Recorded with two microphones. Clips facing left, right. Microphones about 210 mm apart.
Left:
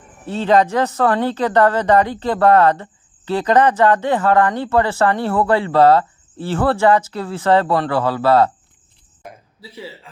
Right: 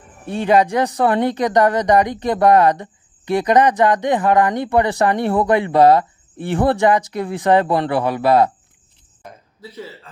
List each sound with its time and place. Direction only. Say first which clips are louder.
0.3 s speech: even; 15° right (ahead or behind)
9.6 s speech: right 2 dB; 10° left (ahead or behind)